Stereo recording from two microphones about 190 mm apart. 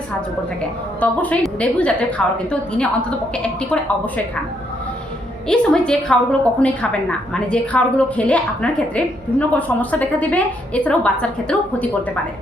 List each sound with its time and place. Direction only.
0.9 s a woman's voice: 5° left (ahead or behind)
5.5 s a woman's voice: 5° left (ahead or behind)